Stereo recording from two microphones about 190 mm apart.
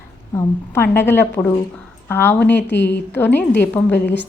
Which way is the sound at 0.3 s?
15° left (ahead or behind).